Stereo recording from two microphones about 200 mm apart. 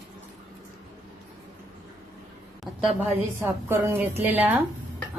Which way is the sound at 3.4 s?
15° right (ahead or behind).